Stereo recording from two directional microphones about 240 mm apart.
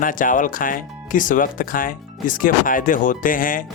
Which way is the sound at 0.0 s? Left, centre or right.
Left.